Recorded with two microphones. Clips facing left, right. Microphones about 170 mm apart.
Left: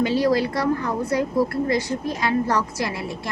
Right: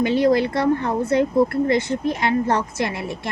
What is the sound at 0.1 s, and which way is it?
A woman's voice, 20° right (ahead or behind).